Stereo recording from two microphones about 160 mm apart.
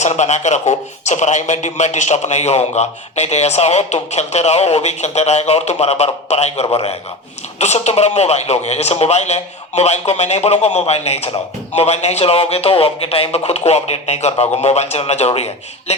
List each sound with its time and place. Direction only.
0.0 s a man's voice: 45° left (ahead or behind)